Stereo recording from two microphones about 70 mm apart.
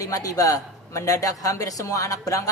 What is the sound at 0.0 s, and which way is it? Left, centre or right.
A man's voice, left.